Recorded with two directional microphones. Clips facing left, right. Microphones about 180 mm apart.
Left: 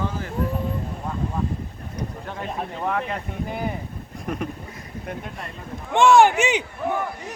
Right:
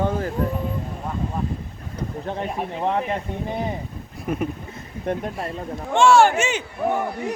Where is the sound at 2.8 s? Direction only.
25° right (ahead or behind).